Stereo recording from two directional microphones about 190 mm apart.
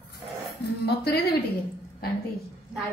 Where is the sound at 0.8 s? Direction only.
55° left (ahead or behind).